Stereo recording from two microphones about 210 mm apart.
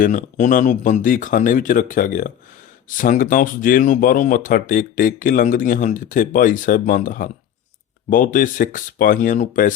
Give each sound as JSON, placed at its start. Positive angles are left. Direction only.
{"t": 0.0, "sound": "speech", "side_deg": 35}